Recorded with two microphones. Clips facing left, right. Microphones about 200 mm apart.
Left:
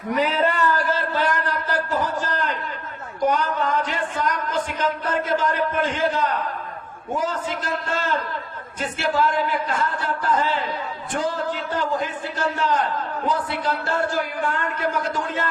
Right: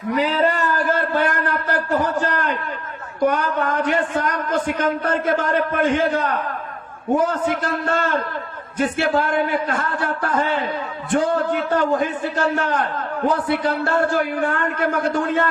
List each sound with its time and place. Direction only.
0.3 s a man's voice: 40° right (ahead or behind)
0.9 s a sound: 55° right (ahead or behind)
3.2 s a man's voice: 55° right (ahead or behind)